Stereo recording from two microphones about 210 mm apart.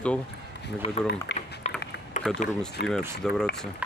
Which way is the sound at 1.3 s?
55° left (ahead or behind).